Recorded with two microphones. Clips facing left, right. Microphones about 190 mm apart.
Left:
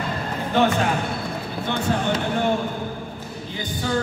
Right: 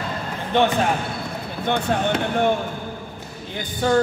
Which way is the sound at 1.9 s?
60° right (ahead or behind).